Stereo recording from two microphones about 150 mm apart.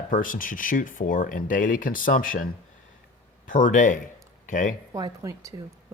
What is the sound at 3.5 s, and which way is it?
Speech, 60° left (ahead or behind).